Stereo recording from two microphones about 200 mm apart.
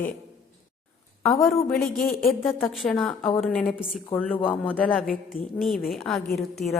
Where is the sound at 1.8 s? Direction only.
45° left (ahead or behind).